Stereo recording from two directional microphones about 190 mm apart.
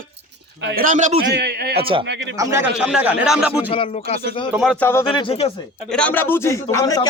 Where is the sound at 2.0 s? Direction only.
65° right (ahead or behind).